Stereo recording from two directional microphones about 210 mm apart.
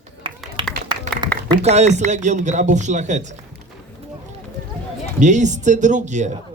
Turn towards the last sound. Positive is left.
turn(degrees=-35)  # may be behind; listen again after turning